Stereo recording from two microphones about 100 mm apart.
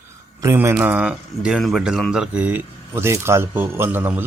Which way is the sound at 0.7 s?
15° right (ahead or behind).